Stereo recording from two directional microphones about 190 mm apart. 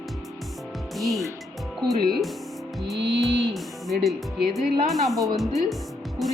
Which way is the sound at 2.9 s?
60° right (ahead or behind).